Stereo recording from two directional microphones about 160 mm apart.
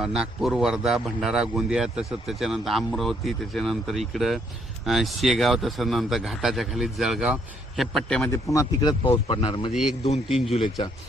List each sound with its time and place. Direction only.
0.0 s speech: 5° right (ahead or behind)
8.2 s speech: 20° left (ahead or behind)
9.7 s speech: centre (ahead or behind)
10.5 s speech: 40° left (ahead or behind)